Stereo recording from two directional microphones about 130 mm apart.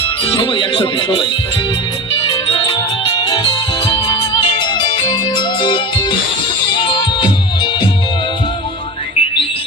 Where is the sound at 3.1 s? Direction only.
35° left (ahead or behind).